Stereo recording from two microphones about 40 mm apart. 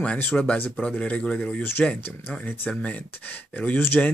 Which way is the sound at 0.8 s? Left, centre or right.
Left.